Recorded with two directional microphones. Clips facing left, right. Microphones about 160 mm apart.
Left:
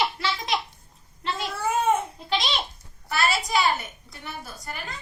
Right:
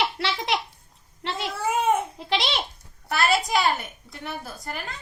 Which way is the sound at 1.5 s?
10° right (ahead or behind).